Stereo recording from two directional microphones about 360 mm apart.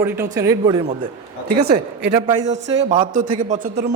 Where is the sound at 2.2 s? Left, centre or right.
Centre.